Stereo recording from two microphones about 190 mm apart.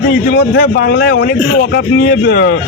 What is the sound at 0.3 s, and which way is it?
A man's voice, 65° left (ahead or behind).